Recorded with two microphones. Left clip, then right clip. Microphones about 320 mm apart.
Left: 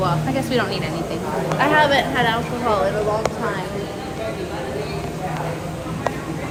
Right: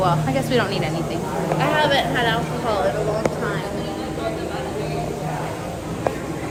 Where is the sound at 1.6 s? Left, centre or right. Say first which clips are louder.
Left 3 dB; centre.